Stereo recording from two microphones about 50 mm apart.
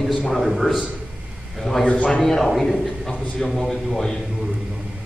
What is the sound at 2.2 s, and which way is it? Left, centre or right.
A man's voice, centre.